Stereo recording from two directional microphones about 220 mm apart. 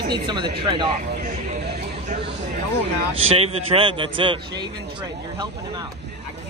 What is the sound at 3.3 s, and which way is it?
Speech, 25° right (ahead or behind).